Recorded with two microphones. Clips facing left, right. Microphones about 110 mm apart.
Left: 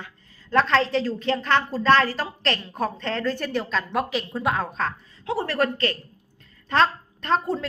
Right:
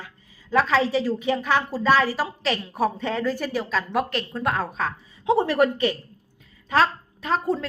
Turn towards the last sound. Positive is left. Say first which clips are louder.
# even
turn(degrees=0)  # may be behind; listen again after turning